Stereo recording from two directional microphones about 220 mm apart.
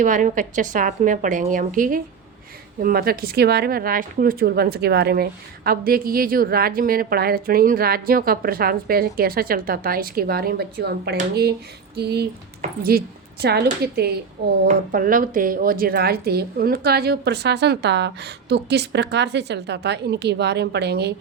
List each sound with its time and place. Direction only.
0.0 s a woman's voice: 35° right (ahead or behind)
12.6 s a woman's voice: 30° right (ahead or behind)
13.4 s speech: 45° right (ahead or behind)